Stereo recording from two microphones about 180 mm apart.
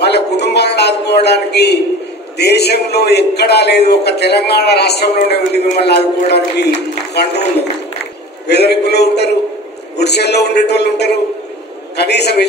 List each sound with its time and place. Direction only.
0.0 s a sound: 70° left (ahead or behind)
2.3 s a man's voice: 65° left (ahead or behind)
8.5 s a man's voice: 65° left (ahead or behind)